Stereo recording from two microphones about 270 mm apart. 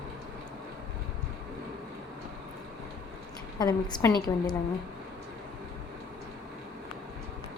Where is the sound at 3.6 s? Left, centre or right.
Centre.